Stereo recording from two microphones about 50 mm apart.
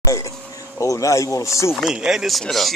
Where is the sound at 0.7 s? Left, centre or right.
Left.